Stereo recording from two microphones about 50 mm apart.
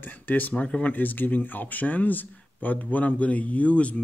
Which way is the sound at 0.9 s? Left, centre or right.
Left.